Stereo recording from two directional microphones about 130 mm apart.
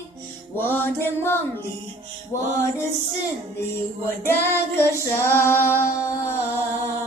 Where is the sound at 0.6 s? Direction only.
15° left (ahead or behind).